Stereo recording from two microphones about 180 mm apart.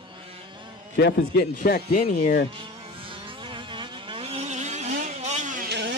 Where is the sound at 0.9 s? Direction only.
65° left (ahead or behind).